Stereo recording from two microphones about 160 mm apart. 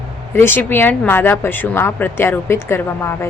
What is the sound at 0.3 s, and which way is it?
A woman's voice, 15° left (ahead or behind).